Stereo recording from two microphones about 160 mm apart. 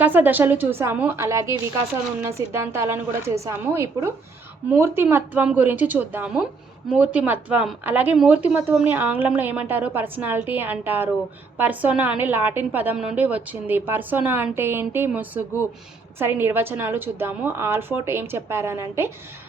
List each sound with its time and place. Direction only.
0.0 s speech: 10° right (ahead or behind)